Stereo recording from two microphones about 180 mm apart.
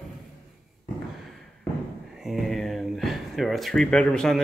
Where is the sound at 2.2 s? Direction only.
Centre (ahead or behind).